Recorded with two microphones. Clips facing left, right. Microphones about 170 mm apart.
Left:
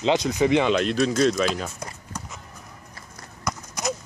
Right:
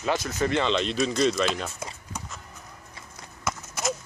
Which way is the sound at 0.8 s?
Centre (ahead or behind).